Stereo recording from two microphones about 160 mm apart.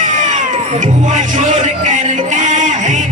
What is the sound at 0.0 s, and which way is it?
Music, 50° right (ahead or behind).